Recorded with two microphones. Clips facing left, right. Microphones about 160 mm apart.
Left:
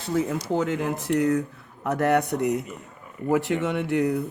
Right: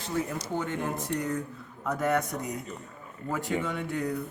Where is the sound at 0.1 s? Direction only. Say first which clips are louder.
Left 7 dB; 75° left (ahead or behind).